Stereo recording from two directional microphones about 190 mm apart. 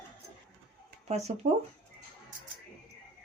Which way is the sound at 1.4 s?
55° right (ahead or behind).